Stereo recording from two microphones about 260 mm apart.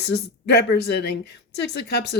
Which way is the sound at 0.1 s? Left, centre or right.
Left.